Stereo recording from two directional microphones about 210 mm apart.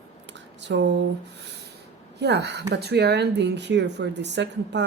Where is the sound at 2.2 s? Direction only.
55° right (ahead or behind).